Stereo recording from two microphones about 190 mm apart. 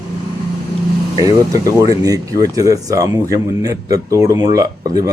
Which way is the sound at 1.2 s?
20° right (ahead or behind).